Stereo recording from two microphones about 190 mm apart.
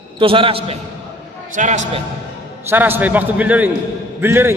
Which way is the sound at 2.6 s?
10° right (ahead or behind).